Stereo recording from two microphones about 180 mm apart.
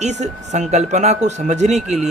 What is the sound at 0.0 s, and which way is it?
Speech, 40° right (ahead or behind).